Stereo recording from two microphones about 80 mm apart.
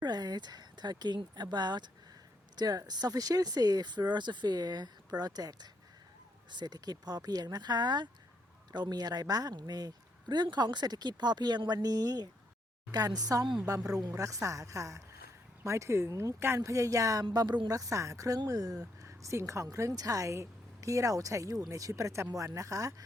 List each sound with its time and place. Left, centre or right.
0.0 s speech: right
2.6 s speech: right
6.5 s speech: right
17.3 s speech: right
17.7 s speech: right
19.0 s a woman's voice: right